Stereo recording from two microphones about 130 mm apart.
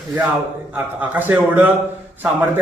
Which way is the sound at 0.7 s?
15° right (ahead or behind).